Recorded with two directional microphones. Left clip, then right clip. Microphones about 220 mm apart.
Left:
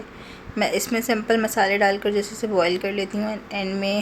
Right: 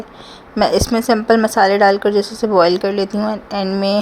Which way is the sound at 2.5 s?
25° right (ahead or behind).